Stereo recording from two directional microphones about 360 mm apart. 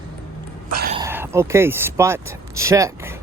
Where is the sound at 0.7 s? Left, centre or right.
Right.